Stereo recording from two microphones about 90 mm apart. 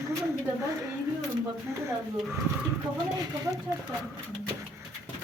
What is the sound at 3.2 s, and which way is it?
Speech, 40° right (ahead or behind).